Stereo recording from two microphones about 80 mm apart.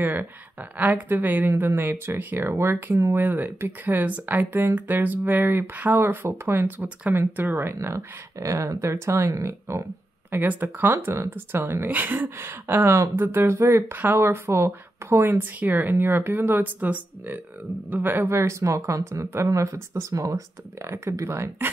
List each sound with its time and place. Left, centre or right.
0.0 s speech: right
10.3 s speech: right
18.3 s speech: right